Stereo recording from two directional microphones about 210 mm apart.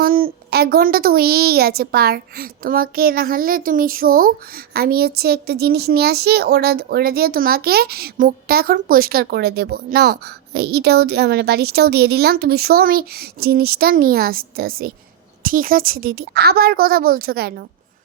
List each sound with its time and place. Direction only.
0.0 s a woman's voice: 45° right (ahead or behind)